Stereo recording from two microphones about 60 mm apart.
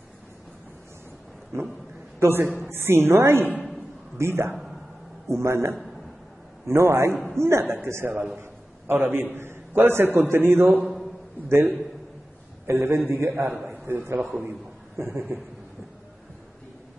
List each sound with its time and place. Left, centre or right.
2.1 s a man's voice: right
8.1 s a man's voice: right
8.4 s a man's voice: right
15.0 s a man's voice: right